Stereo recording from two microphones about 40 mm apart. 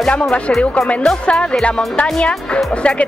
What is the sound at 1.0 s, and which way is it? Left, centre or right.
Speech, centre.